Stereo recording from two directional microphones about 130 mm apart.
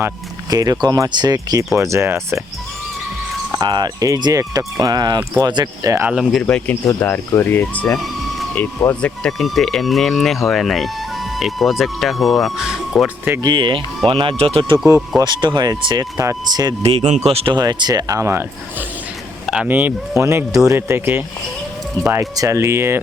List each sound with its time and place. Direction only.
0.5 s speech: 30° right (ahead or behind)
3.5 s speech: 35° right (ahead or behind)
5.9 s speech: 15° right (ahead or behind)
6.3 s speech: 10° left (ahead or behind)
13.4 s speech: 35° right (ahead or behind)
15.2 s speech: 35° right (ahead or behind)
16.8 s speech: 55° right (ahead or behind)
17.5 s speech: 35° right (ahead or behind)